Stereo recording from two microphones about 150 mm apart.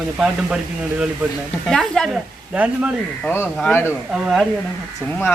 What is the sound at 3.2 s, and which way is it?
Speech, 15° left (ahead or behind).